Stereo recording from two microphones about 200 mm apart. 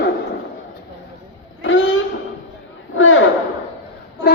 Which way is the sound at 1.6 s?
70° left (ahead or behind).